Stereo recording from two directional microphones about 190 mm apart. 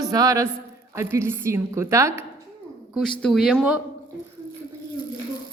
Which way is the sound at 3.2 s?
Centre (ahead or behind).